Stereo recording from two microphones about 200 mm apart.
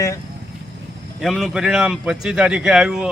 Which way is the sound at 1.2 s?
Centre (ahead or behind).